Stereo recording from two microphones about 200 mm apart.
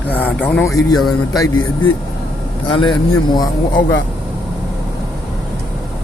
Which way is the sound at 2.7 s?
25° left (ahead or behind).